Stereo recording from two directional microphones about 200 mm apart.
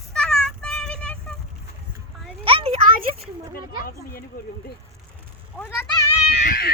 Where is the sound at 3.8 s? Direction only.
50° left (ahead or behind).